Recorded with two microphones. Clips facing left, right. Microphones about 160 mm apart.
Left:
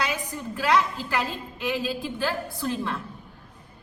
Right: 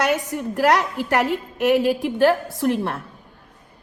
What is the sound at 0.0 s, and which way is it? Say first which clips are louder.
A woman's voice: right 8 dB; 70° right (ahead or behind).